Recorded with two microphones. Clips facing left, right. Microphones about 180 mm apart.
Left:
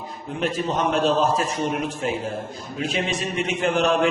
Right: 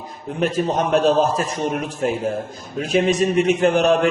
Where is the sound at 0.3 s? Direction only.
45° right (ahead or behind).